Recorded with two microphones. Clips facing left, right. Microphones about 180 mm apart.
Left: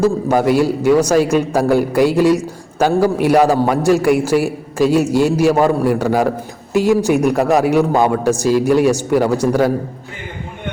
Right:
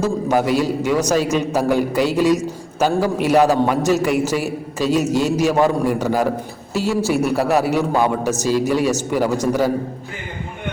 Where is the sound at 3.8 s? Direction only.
10° left (ahead or behind).